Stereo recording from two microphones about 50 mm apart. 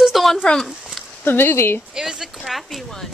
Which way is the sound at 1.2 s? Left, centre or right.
Left.